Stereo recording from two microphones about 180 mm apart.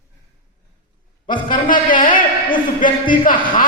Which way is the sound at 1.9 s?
45° left (ahead or behind).